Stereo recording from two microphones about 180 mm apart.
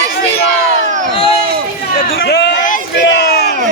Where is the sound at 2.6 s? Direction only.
55° left (ahead or behind).